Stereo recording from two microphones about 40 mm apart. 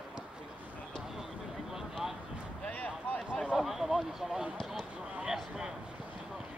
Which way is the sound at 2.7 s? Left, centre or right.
Left.